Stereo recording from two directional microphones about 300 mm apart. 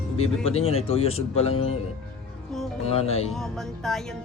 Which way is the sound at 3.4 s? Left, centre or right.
Centre.